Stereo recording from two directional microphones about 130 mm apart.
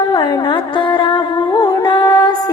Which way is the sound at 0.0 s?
35° left (ahead or behind).